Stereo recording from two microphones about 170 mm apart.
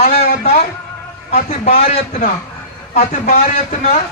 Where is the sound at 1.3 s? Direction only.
45° left (ahead or behind).